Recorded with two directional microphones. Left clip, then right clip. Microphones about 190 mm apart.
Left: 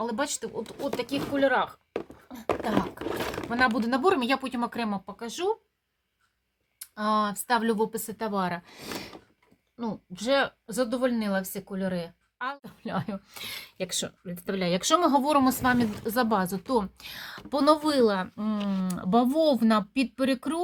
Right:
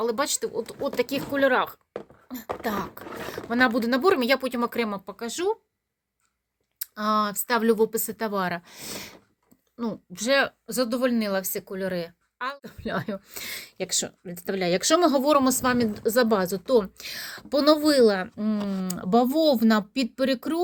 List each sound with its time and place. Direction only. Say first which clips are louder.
0.0 s speech: right 5 dB; 35° right (ahead or behind); by 5.5 s 20° right (ahead or behind)
6.7 s speech: right 2 dB; 15° right (ahead or behind)